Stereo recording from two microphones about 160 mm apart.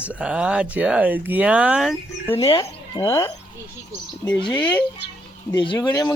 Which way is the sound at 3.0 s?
15° left (ahead or behind).